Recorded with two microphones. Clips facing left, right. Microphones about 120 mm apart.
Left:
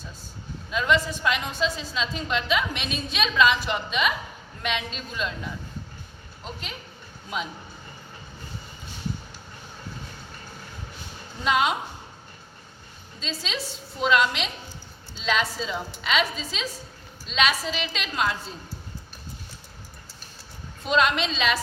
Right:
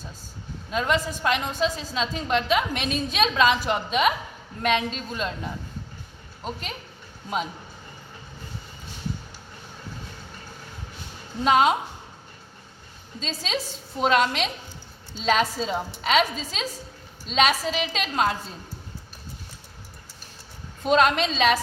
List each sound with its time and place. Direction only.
0.7 s a woman's voice: 40° right (ahead or behind)
11.4 s a woman's voice: 40° right (ahead or behind)
13.1 s a woman's voice: 40° right (ahead or behind)
20.8 s a woman's voice: 45° right (ahead or behind)